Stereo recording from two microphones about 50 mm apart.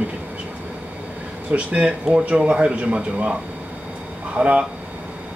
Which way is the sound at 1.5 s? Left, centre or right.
Right.